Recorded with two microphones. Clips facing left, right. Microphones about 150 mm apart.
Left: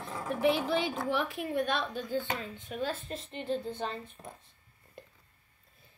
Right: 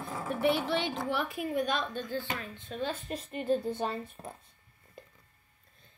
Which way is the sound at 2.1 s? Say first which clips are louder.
Left 2 dB; 20° left (ahead or behind).